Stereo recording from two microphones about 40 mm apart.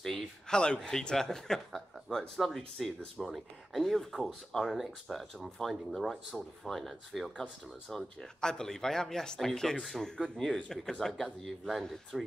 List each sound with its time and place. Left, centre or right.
0.0 s speech: centre
4.6 s speech: centre
5.0 s speech: centre
7.9 s speech: centre
10.0 s speech: centre
11.4 s speech: centre